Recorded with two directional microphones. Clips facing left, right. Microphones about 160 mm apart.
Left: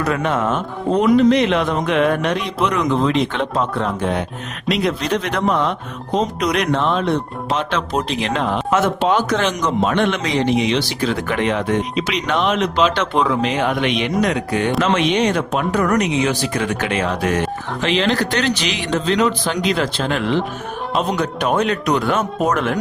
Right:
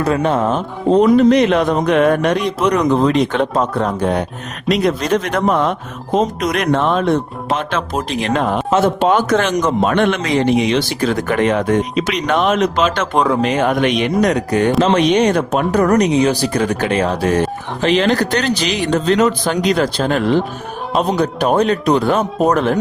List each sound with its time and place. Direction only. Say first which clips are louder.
0.0 s speech: right 4 dB; 30° right (ahead or behind)
1.1 s a man's voice: right 3 dB; 45° right (ahead or behind)